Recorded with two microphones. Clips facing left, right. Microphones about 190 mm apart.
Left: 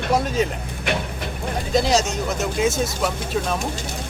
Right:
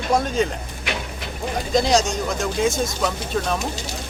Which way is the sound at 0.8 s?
55° left (ahead or behind).